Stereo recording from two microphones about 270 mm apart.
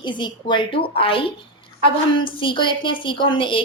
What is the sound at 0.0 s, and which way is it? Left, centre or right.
A woman's voice, centre.